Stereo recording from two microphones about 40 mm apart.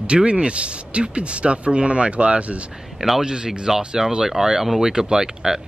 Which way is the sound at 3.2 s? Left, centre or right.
Centre.